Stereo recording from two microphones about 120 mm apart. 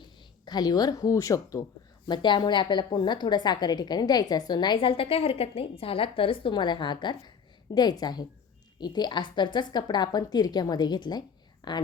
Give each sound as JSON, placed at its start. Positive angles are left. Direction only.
{"t": 0.0, "sound": "speech", "side_deg": 35}
{"t": 2.0, "sound": "a woman's voice", "side_deg": 40}